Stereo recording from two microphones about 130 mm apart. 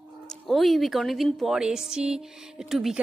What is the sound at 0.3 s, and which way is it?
A woman's voice, centre (ahead or behind).